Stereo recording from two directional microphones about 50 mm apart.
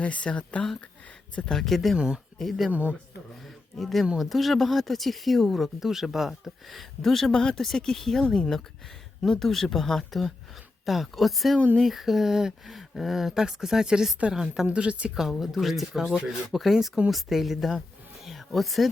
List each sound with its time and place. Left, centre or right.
0.0 s speech: left
1.5 s speech: centre
2.0 s speech: centre
2.4 s speech: centre
2.6 s speech: right
3.8 s speech: centre
14.7 s speech: right
15.1 s speech: centre
18.3 s a sound: centre